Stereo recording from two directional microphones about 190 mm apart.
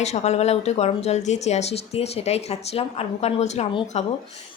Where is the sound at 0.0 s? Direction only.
35° left (ahead or behind).